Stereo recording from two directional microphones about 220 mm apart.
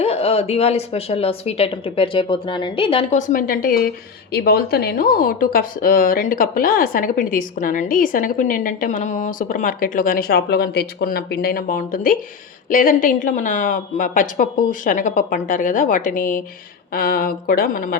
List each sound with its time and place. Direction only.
0.0 s a woman's voice: 25° left (ahead or behind)